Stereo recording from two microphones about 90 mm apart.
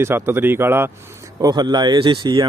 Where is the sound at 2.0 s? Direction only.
60° right (ahead or behind).